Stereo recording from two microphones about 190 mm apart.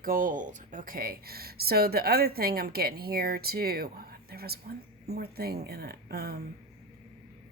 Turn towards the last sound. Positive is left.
turn(degrees=-55)  # may be behind; listen again after turning